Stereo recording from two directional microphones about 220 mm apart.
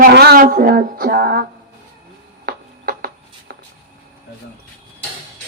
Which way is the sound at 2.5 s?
40° right (ahead or behind).